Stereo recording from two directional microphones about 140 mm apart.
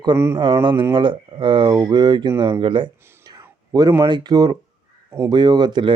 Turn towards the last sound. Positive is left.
turn(degrees=-35)  # may be behind; listen again after turning